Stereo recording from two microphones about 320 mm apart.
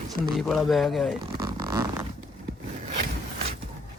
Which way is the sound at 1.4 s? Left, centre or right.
Centre.